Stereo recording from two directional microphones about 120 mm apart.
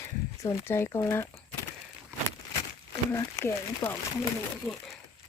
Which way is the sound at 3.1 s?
25° left (ahead or behind).